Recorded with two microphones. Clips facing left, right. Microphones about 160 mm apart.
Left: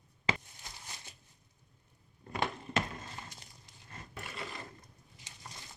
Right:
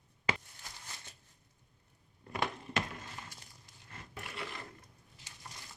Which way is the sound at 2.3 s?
25° left (ahead or behind).